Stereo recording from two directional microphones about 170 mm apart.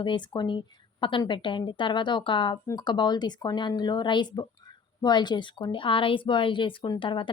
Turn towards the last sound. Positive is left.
turn(degrees=30)  # may be behind; listen again after turning